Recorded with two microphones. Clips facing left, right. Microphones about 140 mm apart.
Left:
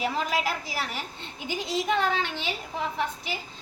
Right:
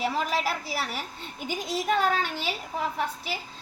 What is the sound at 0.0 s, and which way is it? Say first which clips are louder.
A woman's voice: even; centre (ahead or behind).